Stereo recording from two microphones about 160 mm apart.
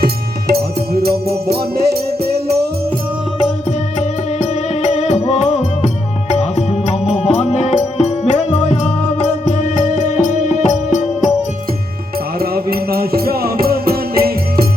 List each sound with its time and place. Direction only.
0.0 s music: 75° right (ahead or behind)
4.8 s music: 45° left (ahead or behind)
12.4 s music: 70° right (ahead or behind)